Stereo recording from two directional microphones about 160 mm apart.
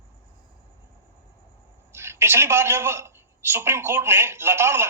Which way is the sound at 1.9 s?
15° right (ahead or behind).